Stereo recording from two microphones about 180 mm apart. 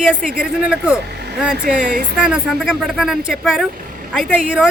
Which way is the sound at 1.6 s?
50° right (ahead or behind).